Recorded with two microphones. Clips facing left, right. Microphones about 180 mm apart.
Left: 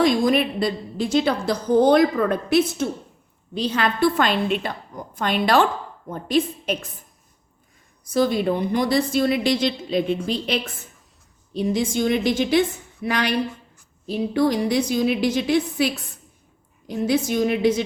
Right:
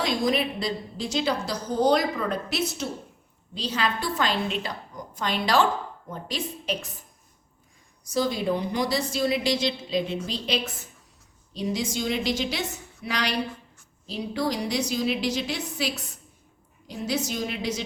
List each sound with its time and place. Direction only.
0.0 s a woman's voice: 55° left (ahead or behind)
8.1 s a woman's voice: 55° left (ahead or behind)